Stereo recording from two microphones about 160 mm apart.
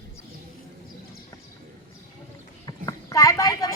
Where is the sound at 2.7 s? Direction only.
20° left (ahead or behind).